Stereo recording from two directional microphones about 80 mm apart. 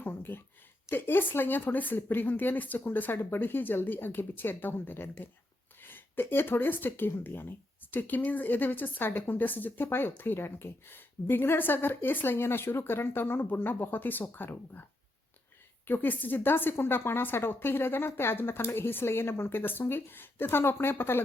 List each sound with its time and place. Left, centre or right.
0.0 s speech: left
15.9 s speech: left